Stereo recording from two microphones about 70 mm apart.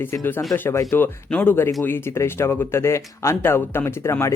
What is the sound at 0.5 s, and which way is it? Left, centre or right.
Speech, left.